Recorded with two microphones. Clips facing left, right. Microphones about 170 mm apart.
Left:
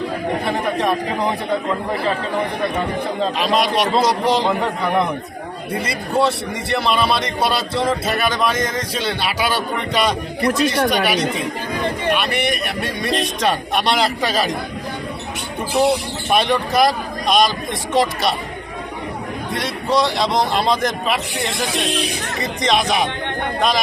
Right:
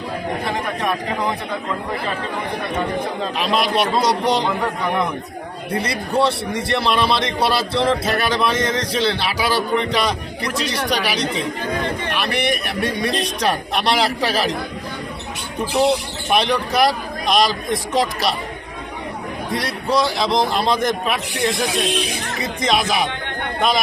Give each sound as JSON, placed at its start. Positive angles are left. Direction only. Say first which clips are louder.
{"t": 3.3, "sound": "a man's voice", "louder": "even", "side_deg": 0}
{"t": 5.8, "sound": "a man's voice", "louder": "left 1 dB", "side_deg": 0}
{"t": 10.4, "sound": "speech", "louder": "left 7 dB", "side_deg": 55}
{"t": 10.9, "sound": "a man's voice", "louder": "left 3 dB", "side_deg": 0}
{"t": 16.3, "sound": "a man's voice", "louder": "left 1 dB", "side_deg": 0}
{"t": 19.5, "sound": "a man's voice", "louder": "even", "side_deg": 0}